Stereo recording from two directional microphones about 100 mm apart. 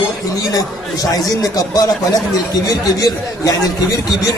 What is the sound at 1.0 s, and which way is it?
Speech, 40° left (ahead or behind).